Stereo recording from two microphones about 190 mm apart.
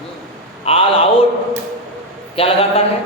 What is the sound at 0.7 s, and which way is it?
Speech, 30° left (ahead or behind).